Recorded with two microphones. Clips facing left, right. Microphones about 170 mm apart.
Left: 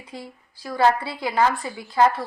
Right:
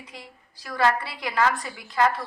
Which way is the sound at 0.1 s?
30° left (ahead or behind).